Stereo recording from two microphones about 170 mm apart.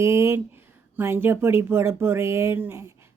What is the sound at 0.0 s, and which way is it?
Speech, 15° right (ahead or behind).